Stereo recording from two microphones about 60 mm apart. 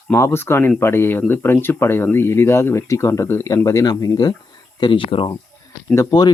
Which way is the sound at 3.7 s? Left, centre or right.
Left.